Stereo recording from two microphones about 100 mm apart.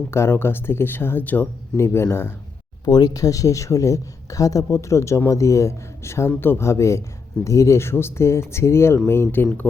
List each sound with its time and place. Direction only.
0.1 s speech: 25° left (ahead or behind)
2.8 s speech: 40° left (ahead or behind); by 9.6 s 20° left (ahead or behind)